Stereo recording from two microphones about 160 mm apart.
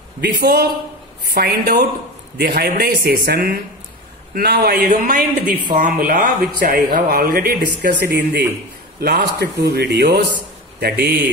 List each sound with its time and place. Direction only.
0.2 s speech: 80° right
1.2 s a man's voice: 70° right (ahead or behind)